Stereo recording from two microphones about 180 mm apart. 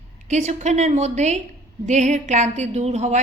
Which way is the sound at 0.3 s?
40° right (ahead or behind).